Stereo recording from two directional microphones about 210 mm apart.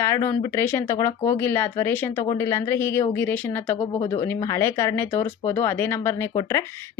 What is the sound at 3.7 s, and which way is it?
Speech, 25° left (ahead or behind).